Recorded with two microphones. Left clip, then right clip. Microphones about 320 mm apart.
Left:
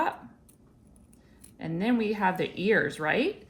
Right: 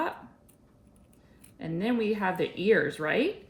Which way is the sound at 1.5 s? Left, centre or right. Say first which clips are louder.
Left 1 dB; centre.